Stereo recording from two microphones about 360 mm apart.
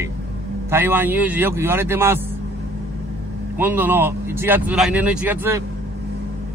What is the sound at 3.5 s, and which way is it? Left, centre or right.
Speech, centre.